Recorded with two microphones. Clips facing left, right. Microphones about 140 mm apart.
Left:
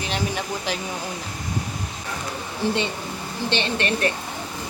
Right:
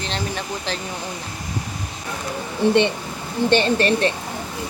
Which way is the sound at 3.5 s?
40° right (ahead or behind).